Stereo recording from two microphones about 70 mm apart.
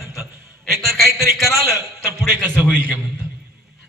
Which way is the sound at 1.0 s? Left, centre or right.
Right.